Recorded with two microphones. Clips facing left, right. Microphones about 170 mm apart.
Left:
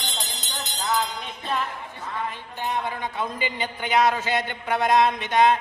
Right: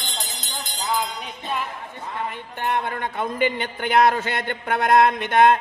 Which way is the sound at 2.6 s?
60° right (ahead or behind).